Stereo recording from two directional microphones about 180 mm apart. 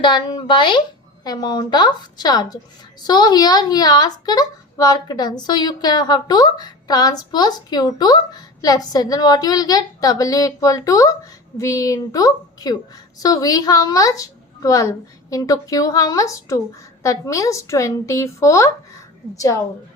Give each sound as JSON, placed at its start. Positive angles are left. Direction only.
{"t": 0.0, "sound": "a woman's voice", "side_deg": 25}